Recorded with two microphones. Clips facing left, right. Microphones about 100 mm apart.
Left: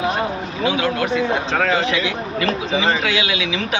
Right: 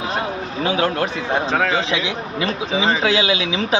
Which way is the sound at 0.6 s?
40° right (ahead or behind).